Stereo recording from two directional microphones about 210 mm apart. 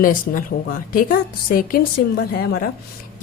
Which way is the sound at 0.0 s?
40° left (ahead or behind).